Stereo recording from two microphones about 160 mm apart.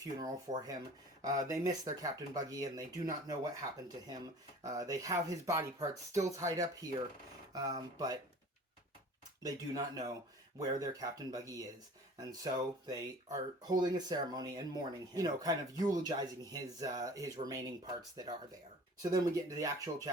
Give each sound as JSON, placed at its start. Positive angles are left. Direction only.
{"t": 0.0, "sound": "speech", "side_deg": -25}
{"t": 9.4, "sound": "speech", "side_deg": -25}
{"t": 19.1, "sound": "speech", "side_deg": -20}